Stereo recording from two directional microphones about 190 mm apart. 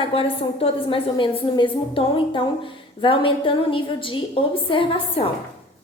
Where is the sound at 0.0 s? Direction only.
30° left (ahead or behind).